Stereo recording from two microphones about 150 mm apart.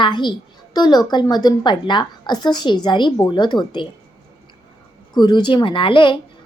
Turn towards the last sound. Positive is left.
turn(degrees=35)  # may be behind; listen again after turning